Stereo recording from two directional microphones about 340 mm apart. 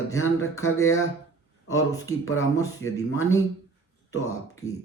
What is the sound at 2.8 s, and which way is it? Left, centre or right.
Speech, left.